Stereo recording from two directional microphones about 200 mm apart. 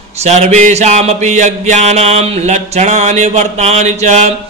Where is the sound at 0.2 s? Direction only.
35° right (ahead or behind).